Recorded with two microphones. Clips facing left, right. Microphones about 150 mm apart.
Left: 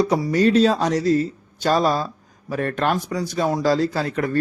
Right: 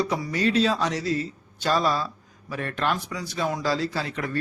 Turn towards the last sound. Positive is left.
turn(degrees=45)  # may be behind; listen again after turning